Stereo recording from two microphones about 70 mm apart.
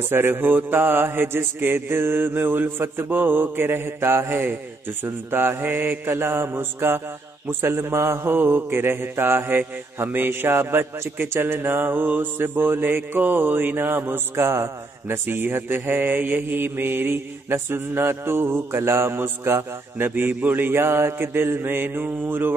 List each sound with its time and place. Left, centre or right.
0.1 s mantra: right